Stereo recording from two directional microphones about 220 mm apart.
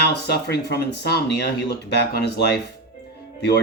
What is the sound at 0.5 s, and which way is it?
Speech, 45° left (ahead or behind).